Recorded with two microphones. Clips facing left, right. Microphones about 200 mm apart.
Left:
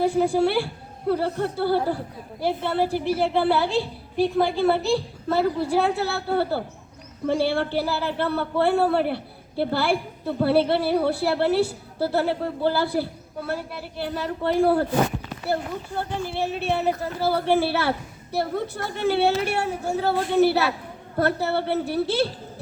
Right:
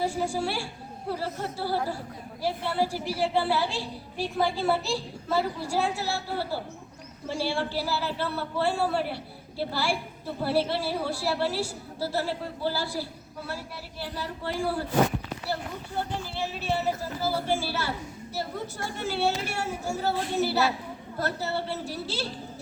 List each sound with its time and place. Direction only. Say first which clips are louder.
0.0 s a woman's voice: left 8 dB; 60° left (ahead or behind)
16.3 s a woman's voice: left 5 dB; 55° left (ahead or behind)